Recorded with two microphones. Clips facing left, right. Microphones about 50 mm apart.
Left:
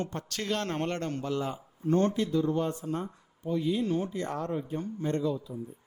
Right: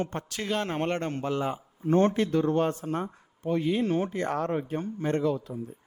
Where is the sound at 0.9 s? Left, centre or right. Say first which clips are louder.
Right 3 dB; right.